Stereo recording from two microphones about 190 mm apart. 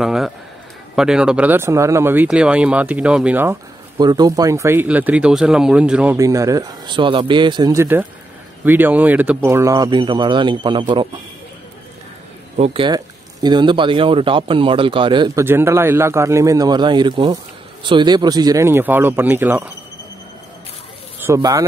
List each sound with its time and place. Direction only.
0.0 s speech: centre (ahead or behind)
4.0 s speech: 20° right (ahead or behind); by 6.1 s 5° right (ahead or behind)
6.1 s speech: 15° right (ahead or behind)
12.5 s speech: 30° right (ahead or behind); by 19.7 s 10° right (ahead or behind)
21.2 s speech: 15° right (ahead or behind)